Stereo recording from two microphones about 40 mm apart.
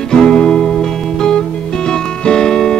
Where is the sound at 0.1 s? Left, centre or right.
Centre.